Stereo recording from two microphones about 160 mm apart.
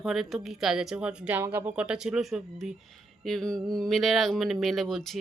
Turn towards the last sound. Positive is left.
turn(degrees=0)  # may be behind; listen again after turning